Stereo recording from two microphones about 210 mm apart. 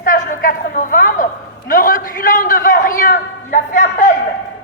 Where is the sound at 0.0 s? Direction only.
40° left (ahead or behind).